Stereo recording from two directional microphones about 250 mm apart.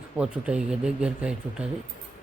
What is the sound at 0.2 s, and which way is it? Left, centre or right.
Speech, centre.